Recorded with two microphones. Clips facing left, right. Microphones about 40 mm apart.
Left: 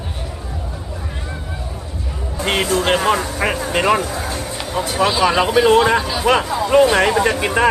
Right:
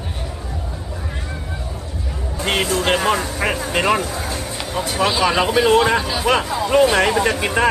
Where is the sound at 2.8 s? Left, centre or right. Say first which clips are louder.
Left 1 dB; centre.